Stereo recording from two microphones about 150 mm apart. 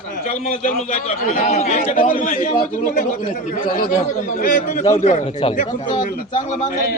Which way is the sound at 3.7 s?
70° left (ahead or behind).